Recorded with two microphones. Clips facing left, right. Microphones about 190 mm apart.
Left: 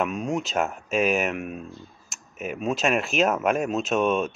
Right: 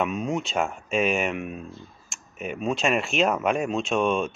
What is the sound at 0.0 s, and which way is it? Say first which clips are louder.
Speech: even; centre (ahead or behind).